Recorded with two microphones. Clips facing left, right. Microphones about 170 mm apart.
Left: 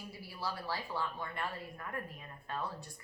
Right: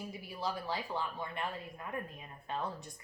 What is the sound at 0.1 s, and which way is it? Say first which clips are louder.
A woman's voice: right 1 dB; 20° right (ahead or behind).